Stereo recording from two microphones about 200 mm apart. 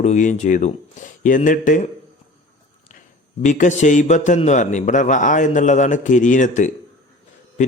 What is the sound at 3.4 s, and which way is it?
A man's voice, 40° left (ahead or behind).